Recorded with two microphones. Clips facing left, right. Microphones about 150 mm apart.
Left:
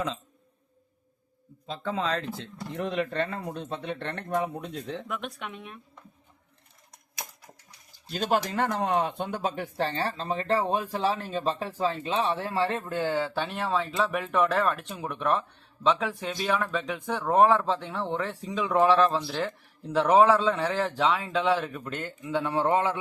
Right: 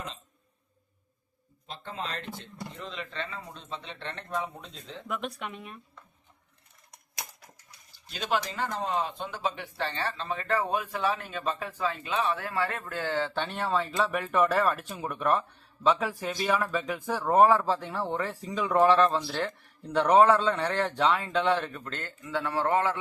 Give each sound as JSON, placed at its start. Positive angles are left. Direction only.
{"t": 2.7, "sound": "speech", "side_deg": 65}
{"t": 5.0, "sound": "speech", "side_deg": 0}
{"t": 8.0, "sound": "speech", "side_deg": 40}
{"t": 8.5, "sound": "speech", "side_deg": 60}